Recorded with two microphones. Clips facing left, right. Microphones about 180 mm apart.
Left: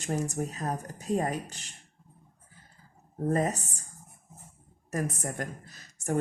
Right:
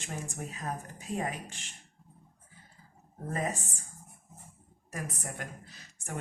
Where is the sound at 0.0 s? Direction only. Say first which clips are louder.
Left 9 dB; 40° left (ahead or behind).